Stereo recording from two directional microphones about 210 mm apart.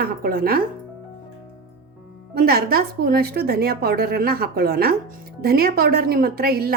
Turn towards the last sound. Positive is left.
turn(degrees=-45)  # may be behind; listen again after turning